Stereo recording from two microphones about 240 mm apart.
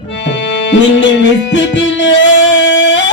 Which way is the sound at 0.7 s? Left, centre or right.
Left.